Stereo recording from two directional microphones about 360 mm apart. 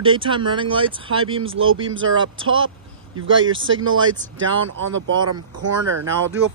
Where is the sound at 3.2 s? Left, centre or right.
Right.